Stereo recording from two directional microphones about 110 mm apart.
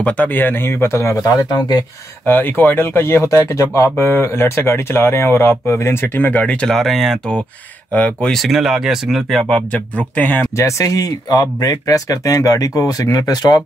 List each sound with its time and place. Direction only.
0.0 s speech: 15° left (ahead or behind); by 1.9 s 40° left (ahead or behind)
2.2 s speech: 20° left (ahead or behind); by 9.4 s 5° right (ahead or behind)
10.1 s speech: 15° left (ahead or behind)
10.6 s speech: 30° left (ahead or behind)